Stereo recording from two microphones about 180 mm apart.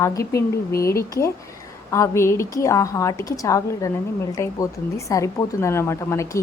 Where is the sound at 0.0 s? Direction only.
15° left (ahead or behind).